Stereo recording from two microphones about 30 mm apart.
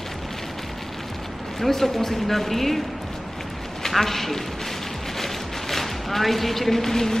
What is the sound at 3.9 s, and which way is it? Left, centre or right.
Speech, centre.